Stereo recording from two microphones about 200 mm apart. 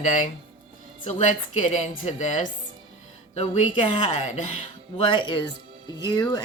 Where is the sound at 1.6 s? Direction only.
35° left (ahead or behind).